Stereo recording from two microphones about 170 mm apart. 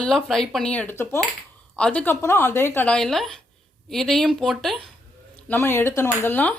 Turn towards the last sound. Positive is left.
turn(degrees=10)  # may be behind; listen again after turning